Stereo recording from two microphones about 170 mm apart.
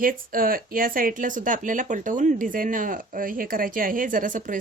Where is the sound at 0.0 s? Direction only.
55° right (ahead or behind).